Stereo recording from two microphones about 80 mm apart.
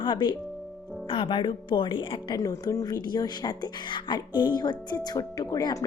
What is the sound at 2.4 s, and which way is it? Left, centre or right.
A woman's voice, left.